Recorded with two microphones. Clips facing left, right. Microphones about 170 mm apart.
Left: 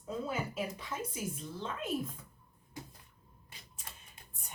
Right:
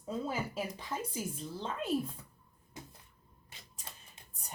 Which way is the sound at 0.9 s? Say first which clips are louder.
Right 1 dB; 30° right (ahead or behind).